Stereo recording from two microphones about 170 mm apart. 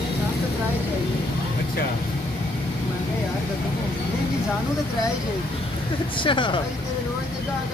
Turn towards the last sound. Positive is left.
turn(degrees=30)  # may be behind; listen again after turning